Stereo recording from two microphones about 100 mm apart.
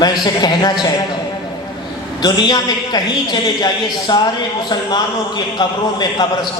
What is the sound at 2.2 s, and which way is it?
A man's voice, 45° left (ahead or behind).